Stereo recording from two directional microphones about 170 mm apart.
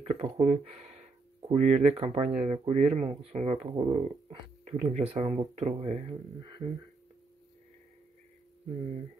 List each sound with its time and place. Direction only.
0.0 s speech: 35° right (ahead or behind)